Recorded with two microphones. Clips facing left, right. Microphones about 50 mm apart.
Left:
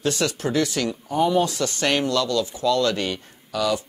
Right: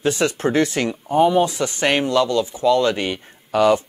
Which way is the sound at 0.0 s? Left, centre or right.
Right.